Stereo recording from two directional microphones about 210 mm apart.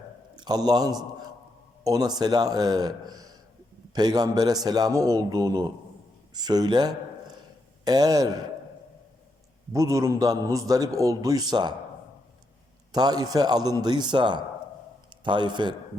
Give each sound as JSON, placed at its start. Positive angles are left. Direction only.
{"t": 0.3, "sound": "a man's voice", "side_deg": -20}
{"t": 9.7, "sound": "a man's voice", "side_deg": -15}
{"t": 12.9, "sound": "speech", "side_deg": -20}